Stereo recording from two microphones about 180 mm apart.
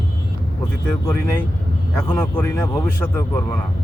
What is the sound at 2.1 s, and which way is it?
Speech, 10° left (ahead or behind).